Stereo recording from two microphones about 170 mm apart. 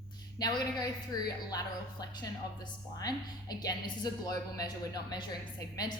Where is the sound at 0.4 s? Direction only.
25° left (ahead or behind).